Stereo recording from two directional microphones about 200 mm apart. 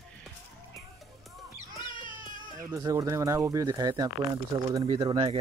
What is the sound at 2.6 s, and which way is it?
Speech, 15° right (ahead or behind).